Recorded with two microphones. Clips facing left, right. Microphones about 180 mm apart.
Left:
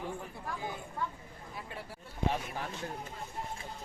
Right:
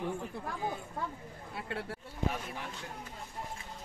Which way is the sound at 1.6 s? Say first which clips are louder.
Right 5 dB; 70° right (ahead or behind).